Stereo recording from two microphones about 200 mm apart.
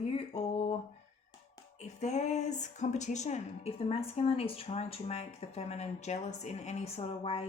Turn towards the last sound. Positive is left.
turn(degrees=30)  # may be behind; listen again after turning